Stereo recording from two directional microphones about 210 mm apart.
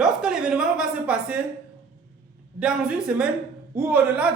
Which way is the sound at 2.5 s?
5° right (ahead or behind).